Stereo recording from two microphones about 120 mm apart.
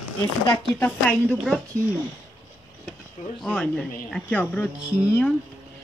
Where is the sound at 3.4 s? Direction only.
5° left (ahead or behind).